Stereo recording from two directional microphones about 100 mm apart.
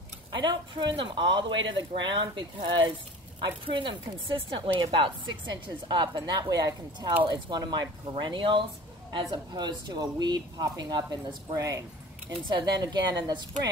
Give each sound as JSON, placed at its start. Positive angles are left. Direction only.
{"t": 0.3, "sound": "speech", "side_deg": -45}
{"t": 12.4, "sound": "speech", "side_deg": -45}